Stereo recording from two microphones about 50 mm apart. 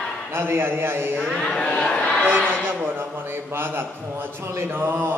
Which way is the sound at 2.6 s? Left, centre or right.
Right.